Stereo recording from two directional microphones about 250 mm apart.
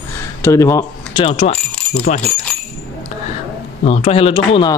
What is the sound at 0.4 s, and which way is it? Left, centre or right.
Speech, centre.